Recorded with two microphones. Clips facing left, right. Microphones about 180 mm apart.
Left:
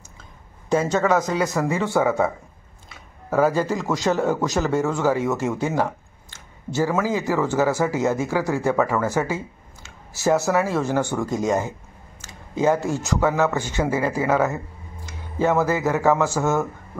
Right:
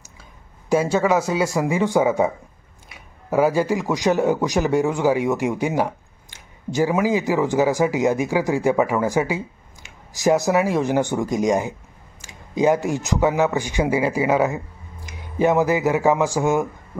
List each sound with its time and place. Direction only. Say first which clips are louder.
0.7 s speech: right 1 dB; 10° right (ahead or behind)